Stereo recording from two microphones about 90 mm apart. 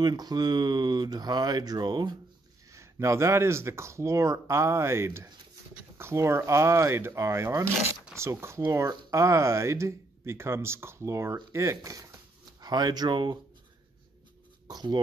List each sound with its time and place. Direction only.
0.0 s speech: 50° right (ahead or behind)
2.7 s speech: 35° right (ahead or behind); by 13.4 s 55° right (ahead or behind)
14.7 s a sound: 55° right (ahead or behind)